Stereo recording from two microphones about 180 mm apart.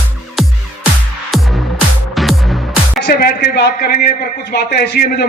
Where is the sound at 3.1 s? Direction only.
60° left (ahead or behind).